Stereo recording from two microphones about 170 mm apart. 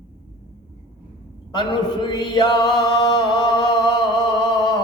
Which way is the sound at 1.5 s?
25° left (ahead or behind).